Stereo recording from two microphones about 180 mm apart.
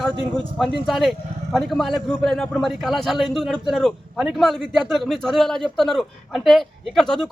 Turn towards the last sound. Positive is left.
turn(degrees=5)  # may be behind; listen again after turning